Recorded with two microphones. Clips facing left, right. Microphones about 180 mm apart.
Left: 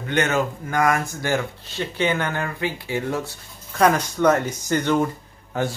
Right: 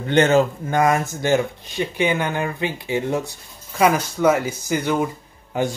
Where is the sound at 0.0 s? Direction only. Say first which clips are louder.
Right 6 dB; 30° right (ahead or behind).